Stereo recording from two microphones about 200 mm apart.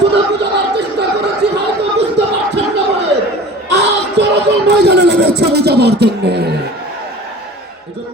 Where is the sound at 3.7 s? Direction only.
60° right (ahead or behind).